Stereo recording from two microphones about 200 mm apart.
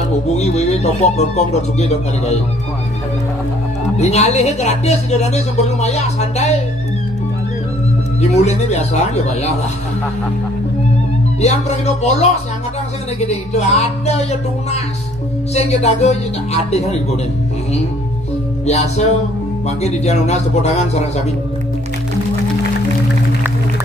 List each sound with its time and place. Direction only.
0.3 s a woman's voice: 35° left (ahead or behind)
4.0 s a woman's voice: 35° left (ahead or behind)
8.2 s a woman's voice: 35° left (ahead or behind)
11.4 s a woman's voice: 35° left (ahead or behind)
18.7 s a woman's voice: 35° left (ahead or behind)